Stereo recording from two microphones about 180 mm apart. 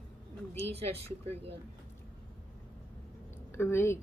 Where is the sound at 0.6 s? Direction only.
35° right (ahead or behind).